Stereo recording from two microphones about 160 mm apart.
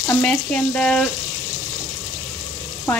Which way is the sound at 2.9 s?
15° left (ahead or behind).